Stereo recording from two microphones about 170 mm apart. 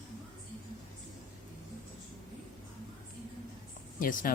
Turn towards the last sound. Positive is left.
turn(degrees=55)  # may be behind; listen again after turning